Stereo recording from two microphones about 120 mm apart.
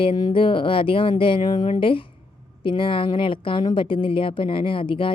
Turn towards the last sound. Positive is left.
turn(degrees=45)  # may be behind; listen again after turning